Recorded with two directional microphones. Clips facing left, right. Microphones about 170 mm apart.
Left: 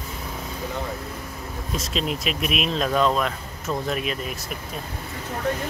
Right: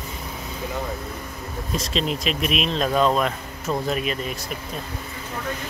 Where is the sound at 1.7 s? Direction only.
Centre (ahead or behind).